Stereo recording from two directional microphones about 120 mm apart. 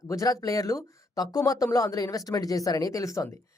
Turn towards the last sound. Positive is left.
turn(degrees=25)  # may be behind; listen again after turning